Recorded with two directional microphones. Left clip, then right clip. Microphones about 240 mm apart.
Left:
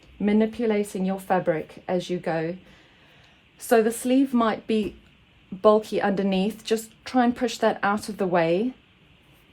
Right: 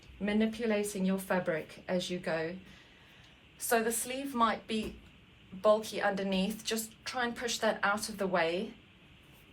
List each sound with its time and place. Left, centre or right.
0.3 s speech: left
3.7 s speech: left